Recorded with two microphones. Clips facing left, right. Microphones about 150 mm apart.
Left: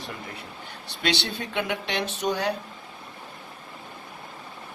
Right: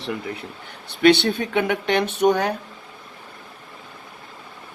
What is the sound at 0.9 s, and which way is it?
Speech, 55° right (ahead or behind).